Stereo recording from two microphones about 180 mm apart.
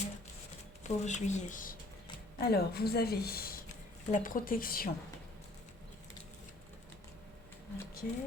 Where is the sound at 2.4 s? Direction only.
60° left (ahead or behind).